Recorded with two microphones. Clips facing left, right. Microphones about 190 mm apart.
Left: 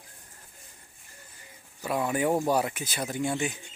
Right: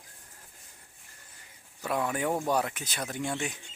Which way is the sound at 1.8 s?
5° left (ahead or behind).